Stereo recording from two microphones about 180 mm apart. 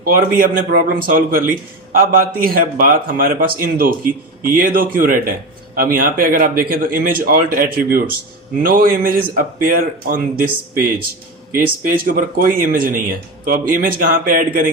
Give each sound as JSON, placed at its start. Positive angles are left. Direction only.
{"t": 0.0, "sound": "speech", "side_deg": -50}
{"t": 11.5, "sound": "speech", "side_deg": -50}